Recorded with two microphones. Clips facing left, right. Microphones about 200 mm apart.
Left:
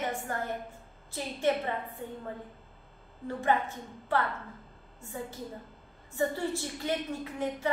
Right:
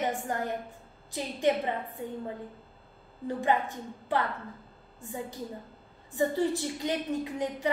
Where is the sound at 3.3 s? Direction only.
15° right (ahead or behind).